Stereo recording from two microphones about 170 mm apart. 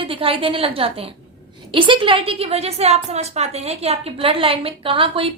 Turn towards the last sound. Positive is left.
turn(degrees=-30)  # may be behind; listen again after turning